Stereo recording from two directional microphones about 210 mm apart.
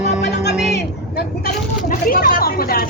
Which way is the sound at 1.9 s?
40° left (ahead or behind).